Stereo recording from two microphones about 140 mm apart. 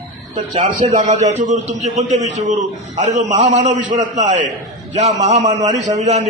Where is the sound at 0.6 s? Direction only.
65° right (ahead or behind).